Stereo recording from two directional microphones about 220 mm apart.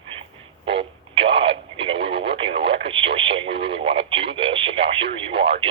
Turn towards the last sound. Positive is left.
turn(degrees=-25)  # may be behind; listen again after turning